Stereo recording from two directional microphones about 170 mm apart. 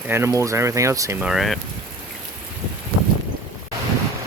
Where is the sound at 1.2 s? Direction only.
Centre (ahead or behind).